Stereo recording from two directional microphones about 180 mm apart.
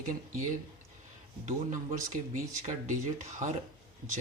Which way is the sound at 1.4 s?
40° right (ahead or behind).